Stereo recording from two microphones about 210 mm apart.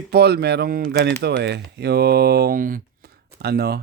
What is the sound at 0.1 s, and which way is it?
Speech, 50° right (ahead or behind).